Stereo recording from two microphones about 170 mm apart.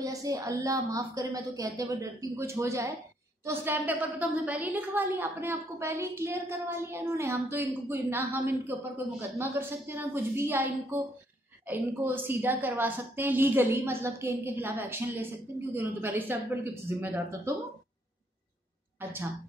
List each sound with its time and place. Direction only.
0.0 s a woman's voice: 20° right (ahead or behind)